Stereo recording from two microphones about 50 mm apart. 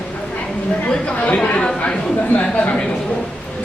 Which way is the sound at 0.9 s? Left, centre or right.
Left.